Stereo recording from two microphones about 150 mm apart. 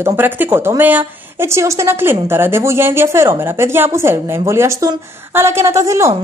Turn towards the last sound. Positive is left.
turn(degrees=-20)  # may be behind; listen again after turning